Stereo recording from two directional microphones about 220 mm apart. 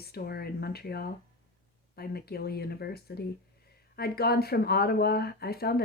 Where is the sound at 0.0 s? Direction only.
45° left (ahead or behind).